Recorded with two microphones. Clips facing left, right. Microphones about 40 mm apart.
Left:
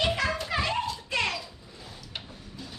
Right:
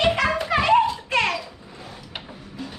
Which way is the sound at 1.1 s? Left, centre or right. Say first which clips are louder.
Right 6 dB; right.